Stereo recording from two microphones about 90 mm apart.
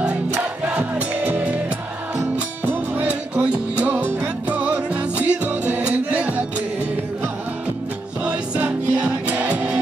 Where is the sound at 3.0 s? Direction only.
15° right (ahead or behind).